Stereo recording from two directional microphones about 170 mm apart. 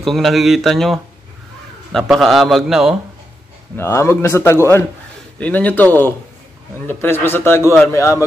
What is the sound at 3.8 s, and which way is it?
A man's voice, 15° left (ahead or behind).